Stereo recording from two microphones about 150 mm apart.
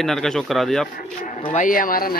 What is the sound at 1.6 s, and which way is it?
Speech, 65° left (ahead or behind).